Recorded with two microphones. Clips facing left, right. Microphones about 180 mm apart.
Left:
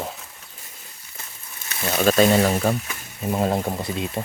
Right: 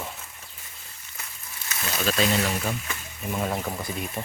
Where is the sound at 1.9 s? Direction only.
50° left (ahead or behind).